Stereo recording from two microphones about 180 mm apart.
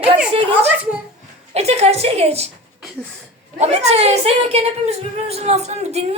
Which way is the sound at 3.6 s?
35° right (ahead or behind).